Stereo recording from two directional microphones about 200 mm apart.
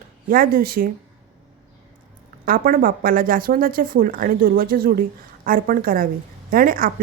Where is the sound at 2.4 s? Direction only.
45° right (ahead or behind).